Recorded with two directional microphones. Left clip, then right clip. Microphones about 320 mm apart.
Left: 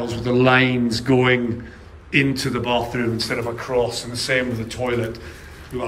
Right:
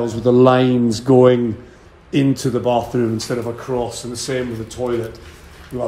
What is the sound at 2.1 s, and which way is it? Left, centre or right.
A man's voice, centre.